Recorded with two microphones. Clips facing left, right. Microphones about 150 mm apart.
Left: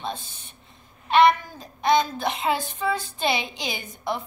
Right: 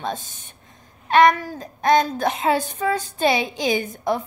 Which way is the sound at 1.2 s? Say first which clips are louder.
Right 1 dB; 45° right (ahead or behind).